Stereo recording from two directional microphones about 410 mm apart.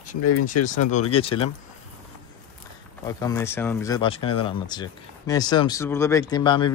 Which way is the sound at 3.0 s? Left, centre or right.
Centre.